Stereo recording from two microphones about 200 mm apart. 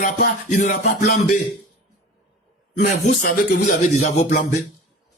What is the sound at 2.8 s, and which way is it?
Speech, 45° left (ahead or behind).